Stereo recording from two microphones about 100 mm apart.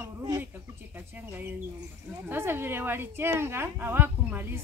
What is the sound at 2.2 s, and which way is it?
Speech, 20° right (ahead or behind).